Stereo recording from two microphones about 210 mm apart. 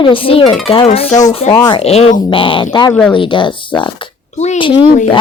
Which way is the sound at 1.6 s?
20° left (ahead or behind).